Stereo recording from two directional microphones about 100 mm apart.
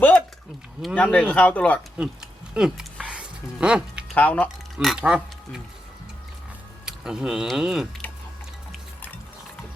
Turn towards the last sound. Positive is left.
turn(degrees=-5)  # may be behind; listen again after turning